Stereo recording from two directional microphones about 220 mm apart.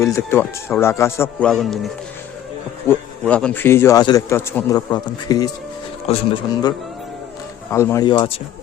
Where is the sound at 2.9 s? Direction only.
5° left (ahead or behind).